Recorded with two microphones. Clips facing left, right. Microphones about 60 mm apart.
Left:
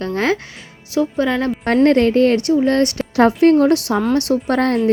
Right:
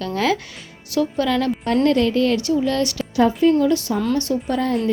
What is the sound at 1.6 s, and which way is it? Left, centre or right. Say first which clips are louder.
A woman's voice: left 6 dB; left.